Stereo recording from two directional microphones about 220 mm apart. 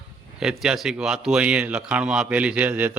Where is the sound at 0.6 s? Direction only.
5° right (ahead or behind).